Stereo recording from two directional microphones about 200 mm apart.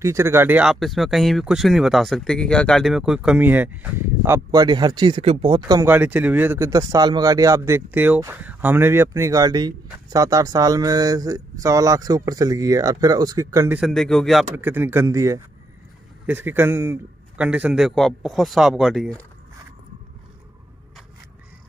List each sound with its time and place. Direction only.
0.0 s speech: 15° right (ahead or behind)
13.7 s a man's voice: centre (ahead or behind)
14.5 s a man's voice: 10° right (ahead or behind)